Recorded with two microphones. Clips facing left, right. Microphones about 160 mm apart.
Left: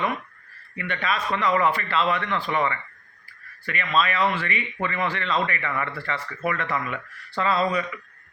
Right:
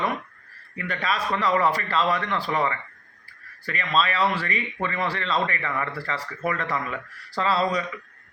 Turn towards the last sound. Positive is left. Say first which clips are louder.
# even
turn(degrees=-35)  # may be behind; listen again after turning